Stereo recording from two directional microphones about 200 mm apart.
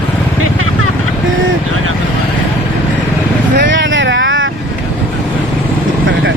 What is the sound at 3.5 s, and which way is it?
Vehicle, 65° right (ahead or behind).